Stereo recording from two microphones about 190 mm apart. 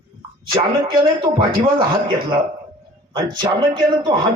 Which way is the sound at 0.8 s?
25° right (ahead or behind).